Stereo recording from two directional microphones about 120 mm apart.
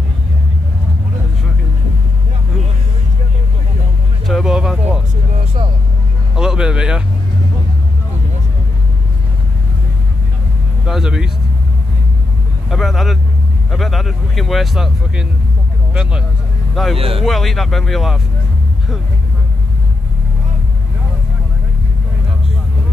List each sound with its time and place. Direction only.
4.3 s music: centre (ahead or behind)
5.4 s vehicle: 55° right (ahead or behind)
6.3 s a sound: 5° right (ahead or behind)
10.9 s vehicle: 5° right (ahead or behind)
12.6 s vehicle: centre (ahead or behind)
16.9 s speech: 55° right (ahead or behind)
17.2 s speech: centre (ahead or behind)